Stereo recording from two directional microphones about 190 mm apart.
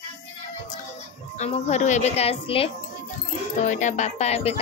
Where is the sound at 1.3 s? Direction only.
35° left (ahead or behind).